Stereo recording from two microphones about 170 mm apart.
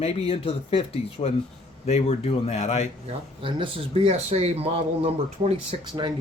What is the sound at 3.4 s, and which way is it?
Speech, 30° right (ahead or behind).